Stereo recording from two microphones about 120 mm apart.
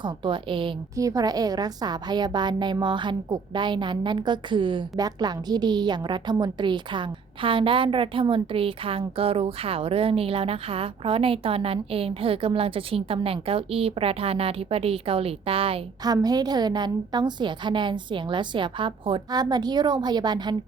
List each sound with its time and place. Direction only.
0.0 s a woman's voice: 45° right (ahead or behind)
0.9 s a woman's voice: 30° right (ahead or behind); by 15.8 s 50° right (ahead or behind)
16.0 s a woman's voice: 35° right (ahead or behind)